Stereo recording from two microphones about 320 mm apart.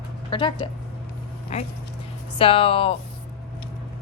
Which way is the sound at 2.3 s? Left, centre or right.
Centre.